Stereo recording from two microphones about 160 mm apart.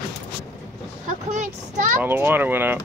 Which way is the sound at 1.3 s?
50° right (ahead or behind).